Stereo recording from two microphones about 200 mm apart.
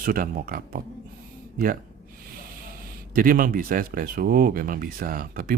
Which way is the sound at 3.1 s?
45° right (ahead or behind).